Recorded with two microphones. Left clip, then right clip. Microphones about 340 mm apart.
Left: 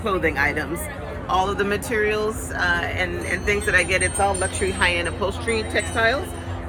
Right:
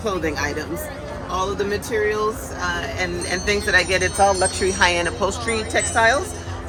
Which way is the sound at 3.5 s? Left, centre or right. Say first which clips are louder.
Right 1 dB; right.